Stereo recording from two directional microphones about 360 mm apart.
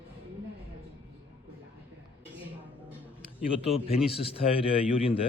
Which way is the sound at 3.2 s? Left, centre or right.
Centre.